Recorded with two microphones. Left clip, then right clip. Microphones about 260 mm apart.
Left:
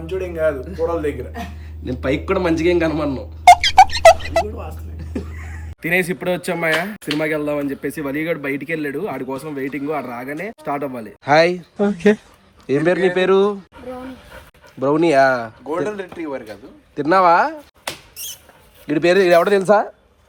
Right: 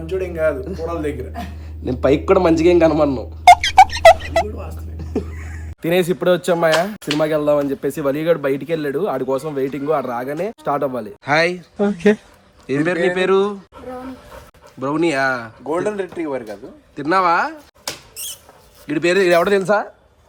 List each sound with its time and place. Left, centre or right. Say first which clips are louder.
0.0 s a man's voice: right 1 dB; centre
5.8 s speech: right 2 dB; centre
14.8 s a man's voice: left 4 dB; centre
15.6 s speech: right 2 dB; right
16.9 s a man's voice: left 3 dB; centre
18.9 s speech: left 1 dB; centre